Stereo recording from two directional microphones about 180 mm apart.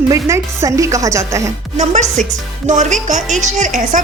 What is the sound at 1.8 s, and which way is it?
Speech, 40° right (ahead or behind).